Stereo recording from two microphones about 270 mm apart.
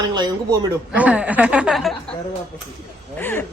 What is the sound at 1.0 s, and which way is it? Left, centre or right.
Speech, centre.